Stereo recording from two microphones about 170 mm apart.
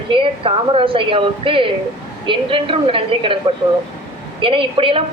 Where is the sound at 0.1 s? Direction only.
30° right (ahead or behind).